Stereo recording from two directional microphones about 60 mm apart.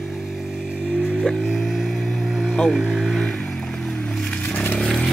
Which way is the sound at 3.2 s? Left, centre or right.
Centre.